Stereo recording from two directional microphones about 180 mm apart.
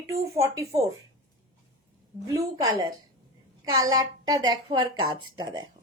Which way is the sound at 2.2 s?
15° right (ahead or behind).